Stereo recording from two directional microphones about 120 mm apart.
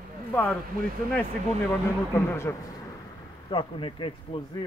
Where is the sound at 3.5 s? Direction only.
45° left (ahead or behind).